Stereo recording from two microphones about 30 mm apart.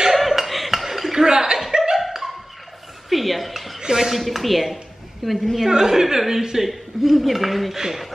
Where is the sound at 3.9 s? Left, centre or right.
Centre.